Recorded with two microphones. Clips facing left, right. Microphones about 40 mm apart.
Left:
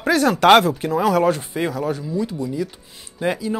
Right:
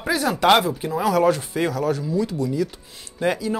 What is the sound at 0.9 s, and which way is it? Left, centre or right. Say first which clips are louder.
Speech: left 1 dB; left.